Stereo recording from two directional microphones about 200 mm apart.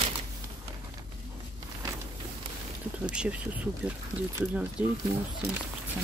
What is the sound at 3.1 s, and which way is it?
Speech, 5° right (ahead or behind).